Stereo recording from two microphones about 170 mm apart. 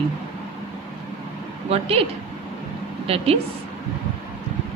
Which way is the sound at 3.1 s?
35° right (ahead or behind).